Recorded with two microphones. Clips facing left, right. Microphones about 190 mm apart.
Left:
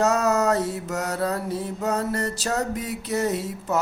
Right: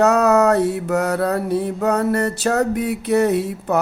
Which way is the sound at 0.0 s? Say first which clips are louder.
Right 6 dB; 65° right (ahead or behind).